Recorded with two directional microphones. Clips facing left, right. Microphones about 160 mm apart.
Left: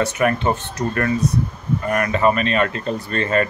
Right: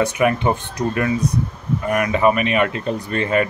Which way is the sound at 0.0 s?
15° right (ahead or behind).